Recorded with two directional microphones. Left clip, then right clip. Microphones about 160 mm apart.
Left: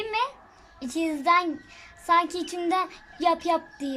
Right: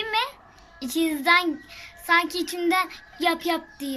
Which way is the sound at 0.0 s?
10° left (ahead or behind).